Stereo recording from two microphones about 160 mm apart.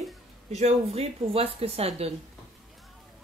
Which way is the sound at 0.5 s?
45° right (ahead or behind).